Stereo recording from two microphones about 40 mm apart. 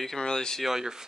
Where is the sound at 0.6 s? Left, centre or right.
Centre.